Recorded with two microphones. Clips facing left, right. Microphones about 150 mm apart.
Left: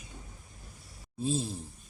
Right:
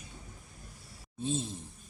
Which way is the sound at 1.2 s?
35° left (ahead or behind).